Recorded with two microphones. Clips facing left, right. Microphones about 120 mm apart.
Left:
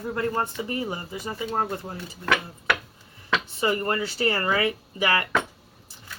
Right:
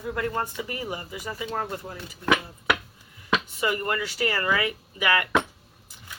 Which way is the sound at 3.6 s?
30° left (ahead or behind).